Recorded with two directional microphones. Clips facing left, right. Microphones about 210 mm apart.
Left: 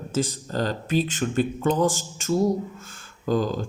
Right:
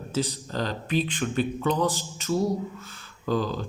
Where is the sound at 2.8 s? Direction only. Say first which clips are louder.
Even; 45° left (ahead or behind).